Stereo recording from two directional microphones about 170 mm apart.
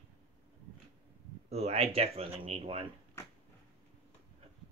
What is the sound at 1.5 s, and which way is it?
Speech, 35° right (ahead or behind).